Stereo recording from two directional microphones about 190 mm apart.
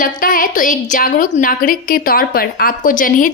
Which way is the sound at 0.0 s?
45° left (ahead or behind).